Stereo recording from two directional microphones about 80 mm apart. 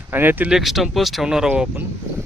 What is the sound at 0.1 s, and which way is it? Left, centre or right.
Speech, right.